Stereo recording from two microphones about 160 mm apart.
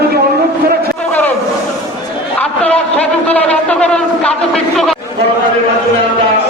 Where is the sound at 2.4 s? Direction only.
10° left (ahead or behind).